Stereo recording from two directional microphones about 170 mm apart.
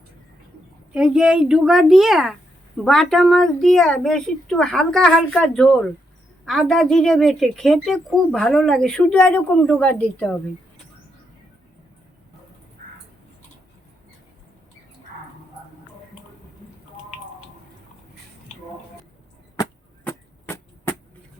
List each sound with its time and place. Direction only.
0.9 s a woman's voice: 5° right (ahead or behind)
12.8 s a sound: 60° right (ahead or behind)
20.1 s chop: 15° left (ahead or behind)